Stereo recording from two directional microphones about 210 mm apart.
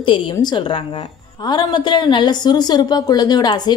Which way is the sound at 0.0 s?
20° left (ahead or behind).